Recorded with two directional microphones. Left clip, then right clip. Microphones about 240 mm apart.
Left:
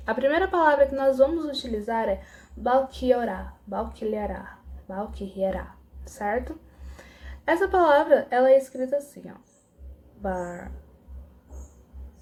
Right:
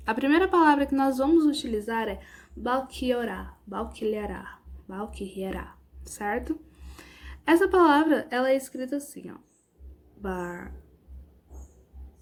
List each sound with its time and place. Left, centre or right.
0.0 s a woman's voice: right